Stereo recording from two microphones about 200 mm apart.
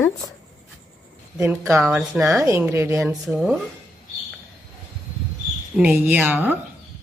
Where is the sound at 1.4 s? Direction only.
15° right (ahead or behind).